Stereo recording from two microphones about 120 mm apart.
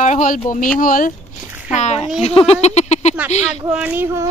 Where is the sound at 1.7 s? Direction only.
70° left (ahead or behind).